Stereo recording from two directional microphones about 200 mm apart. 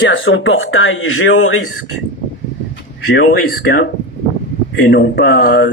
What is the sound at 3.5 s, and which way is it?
Speech, 50° left (ahead or behind).